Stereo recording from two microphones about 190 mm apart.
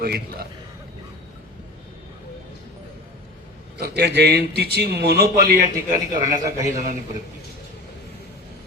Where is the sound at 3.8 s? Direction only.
60° right (ahead or behind).